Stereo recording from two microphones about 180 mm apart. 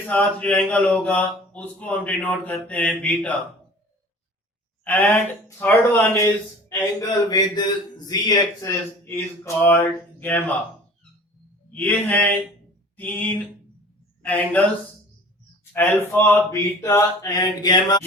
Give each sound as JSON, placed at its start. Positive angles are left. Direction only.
{"t": 0.1, "sound": "a man's voice", "side_deg": 10}
{"t": 4.8, "sound": "a man's voice", "side_deg": 10}
{"t": 11.7, "sound": "a man's voice", "side_deg": 10}
{"t": 15.7, "sound": "a man's voice", "side_deg": 10}